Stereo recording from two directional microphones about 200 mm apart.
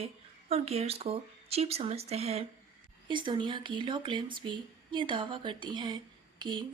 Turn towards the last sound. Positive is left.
turn(degrees=-25)  # may be behind; listen again after turning